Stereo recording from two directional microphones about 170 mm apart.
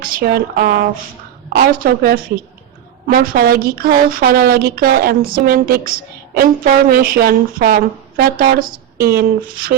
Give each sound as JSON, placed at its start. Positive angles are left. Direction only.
{"t": 0.0, "sound": "speech", "side_deg": -60}